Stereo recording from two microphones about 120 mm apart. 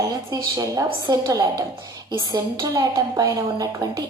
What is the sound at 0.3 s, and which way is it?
A woman's voice, 30° right (ahead or behind).